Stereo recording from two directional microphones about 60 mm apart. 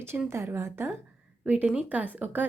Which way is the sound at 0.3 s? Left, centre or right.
Right.